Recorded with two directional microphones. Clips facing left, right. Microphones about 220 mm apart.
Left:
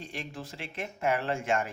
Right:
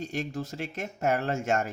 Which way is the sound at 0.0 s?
40° right (ahead or behind).